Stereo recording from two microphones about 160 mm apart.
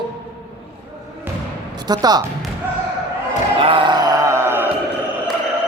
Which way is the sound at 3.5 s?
35° right (ahead or behind).